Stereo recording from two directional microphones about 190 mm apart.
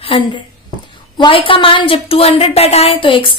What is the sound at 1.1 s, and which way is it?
A woman's voice, 25° left (ahead or behind).